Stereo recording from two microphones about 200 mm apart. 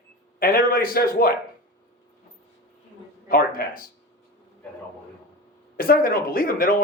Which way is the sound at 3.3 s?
45° left (ahead or behind).